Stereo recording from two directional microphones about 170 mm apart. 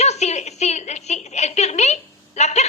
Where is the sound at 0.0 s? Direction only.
40° left (ahead or behind).